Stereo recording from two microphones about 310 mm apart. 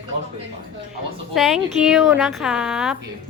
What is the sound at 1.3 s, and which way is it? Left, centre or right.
Speech, centre.